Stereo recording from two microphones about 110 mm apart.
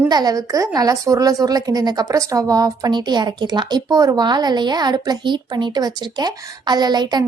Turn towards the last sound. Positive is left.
turn(degrees=-40)  # may be behind; listen again after turning